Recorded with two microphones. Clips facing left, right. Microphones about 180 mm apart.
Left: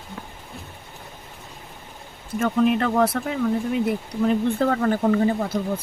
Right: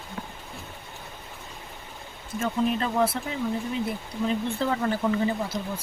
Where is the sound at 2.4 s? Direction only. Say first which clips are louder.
Left 6 dB; 65° left (ahead or behind).